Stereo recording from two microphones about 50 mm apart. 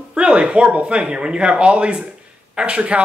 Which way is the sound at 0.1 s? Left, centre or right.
Right.